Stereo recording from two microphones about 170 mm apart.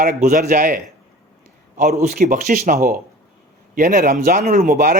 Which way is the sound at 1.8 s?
45° right (ahead or behind).